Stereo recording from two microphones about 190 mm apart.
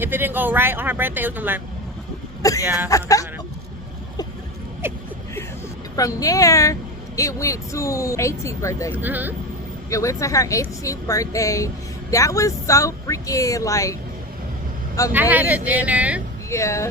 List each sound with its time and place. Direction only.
0.0 s speech: 10° right (ahead or behind)
2.4 s speech: 15° left (ahead or behind)
2.6 s speech: 10° right (ahead or behind)
2.9 s speech: 15° left (ahead or behind)
4.8 s speech: 10° right (ahead or behind)
6.0 s speech: 20° left (ahead or behind)
9.0 s speech: 10° right (ahead or behind)
9.9 s speech: 15° left (ahead or behind)
15.1 s speech: 10° right (ahead or behind)
16.5 s speech: 15° left (ahead or behind)